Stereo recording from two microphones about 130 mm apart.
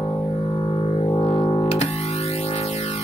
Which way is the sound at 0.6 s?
35° left (ahead or behind).